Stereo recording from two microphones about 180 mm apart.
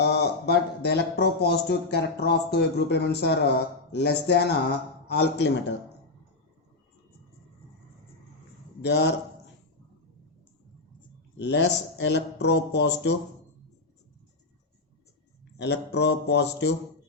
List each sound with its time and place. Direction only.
0.0 s a man's voice: 65° left (ahead or behind)
8.8 s a man's voice: 70° left (ahead or behind)
11.3 s a man's voice: 75° left (ahead or behind)
15.5 s a man's voice: 70° left (ahead or behind)